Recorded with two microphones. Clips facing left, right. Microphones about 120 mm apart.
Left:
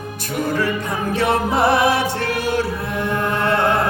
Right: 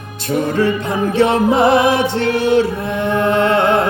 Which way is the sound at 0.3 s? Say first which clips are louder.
Right 5 dB; 25° right (ahead or behind).